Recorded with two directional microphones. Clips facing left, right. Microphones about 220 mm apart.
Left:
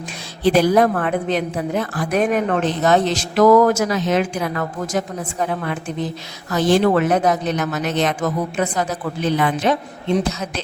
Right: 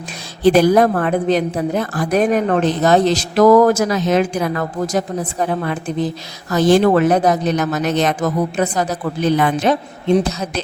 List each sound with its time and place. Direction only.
0.4 s a woman's voice: 45° right (ahead or behind)